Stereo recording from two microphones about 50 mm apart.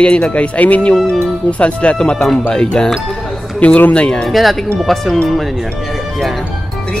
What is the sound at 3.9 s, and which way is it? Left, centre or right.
Speech, left.